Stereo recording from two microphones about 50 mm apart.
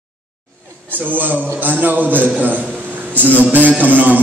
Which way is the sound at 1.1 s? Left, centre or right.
Right.